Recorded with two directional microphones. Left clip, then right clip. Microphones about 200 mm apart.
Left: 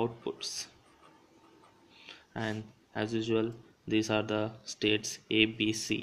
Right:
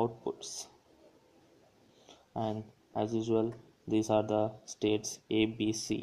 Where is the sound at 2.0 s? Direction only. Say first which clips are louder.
Right 1 dB; 25° left (ahead or behind).